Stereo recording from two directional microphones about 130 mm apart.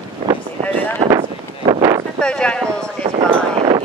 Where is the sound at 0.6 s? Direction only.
10° left (ahead or behind).